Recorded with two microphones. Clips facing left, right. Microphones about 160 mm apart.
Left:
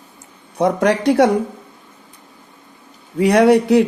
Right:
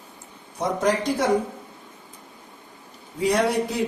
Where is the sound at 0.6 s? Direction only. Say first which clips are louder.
Left 7 dB; 70° left (ahead or behind).